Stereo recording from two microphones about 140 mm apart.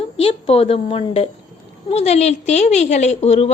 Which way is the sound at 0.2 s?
45° left (ahead or behind).